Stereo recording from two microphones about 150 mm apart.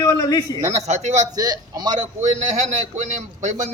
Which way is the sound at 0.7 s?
45° right (ahead or behind).